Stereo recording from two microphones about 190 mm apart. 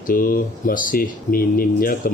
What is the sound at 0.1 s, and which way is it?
Speech, 50° left (ahead or behind).